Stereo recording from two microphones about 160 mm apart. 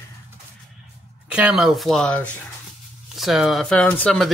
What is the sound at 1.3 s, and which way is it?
Speech, 5° right (ahead or behind).